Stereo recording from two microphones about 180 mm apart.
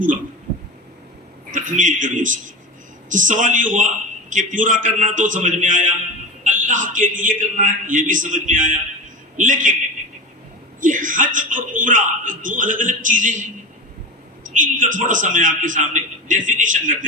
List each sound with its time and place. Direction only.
1.5 s a man's voice: 45° right (ahead or behind)
6.4 s a sound: 45° right (ahead or behind)
7.2 s a man's voice: 45° right (ahead or behind)
10.8 s speech: 45° right (ahead or behind)
14.6 s a man's voice: 45° right (ahead or behind)